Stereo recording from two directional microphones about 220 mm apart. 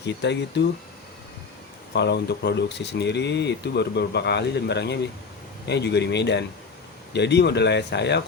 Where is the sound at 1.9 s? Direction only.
50° left (ahead or behind).